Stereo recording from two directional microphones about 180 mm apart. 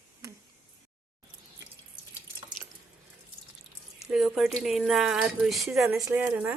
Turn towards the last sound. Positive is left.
turn(degrees=-10)  # may be behind; listen again after turning